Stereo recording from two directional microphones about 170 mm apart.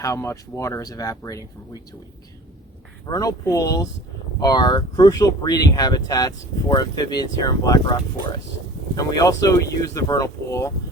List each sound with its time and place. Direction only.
0.0 s speech: 20° left (ahead or behind)
3.1 s speech: 20° left (ahead or behind)